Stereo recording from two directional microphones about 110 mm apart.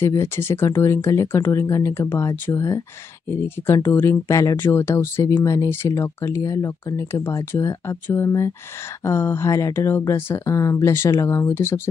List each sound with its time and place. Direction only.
0.0 s speech: 25° left (ahead or behind)